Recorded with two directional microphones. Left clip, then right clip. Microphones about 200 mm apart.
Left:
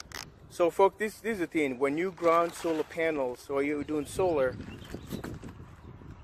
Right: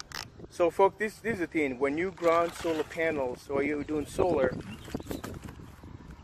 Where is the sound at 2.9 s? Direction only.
20° left (ahead or behind).